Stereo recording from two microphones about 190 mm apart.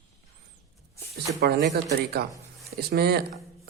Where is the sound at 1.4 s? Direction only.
60° right (ahead or behind).